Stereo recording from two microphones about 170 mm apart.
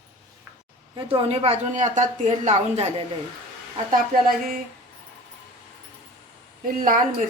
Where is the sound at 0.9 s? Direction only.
35° right (ahead or behind).